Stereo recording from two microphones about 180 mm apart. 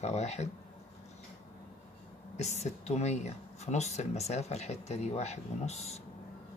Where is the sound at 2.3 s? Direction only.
40° left (ahead or behind).